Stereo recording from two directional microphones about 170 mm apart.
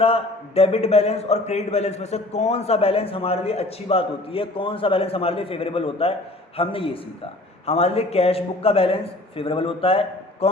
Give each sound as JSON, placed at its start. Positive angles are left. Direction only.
{"t": 0.0, "sound": "a man's voice", "side_deg": 35}